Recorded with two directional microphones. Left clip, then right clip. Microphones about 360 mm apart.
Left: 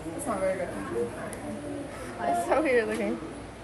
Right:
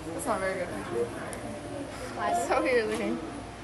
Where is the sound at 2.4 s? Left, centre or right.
Centre.